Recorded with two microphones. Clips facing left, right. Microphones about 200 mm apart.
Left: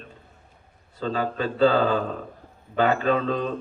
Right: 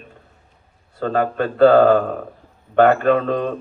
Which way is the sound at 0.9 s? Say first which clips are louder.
Right 6 dB; 55° right (ahead or behind).